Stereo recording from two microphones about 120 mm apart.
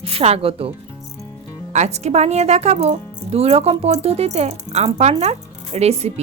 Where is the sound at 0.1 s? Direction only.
55° right (ahead or behind).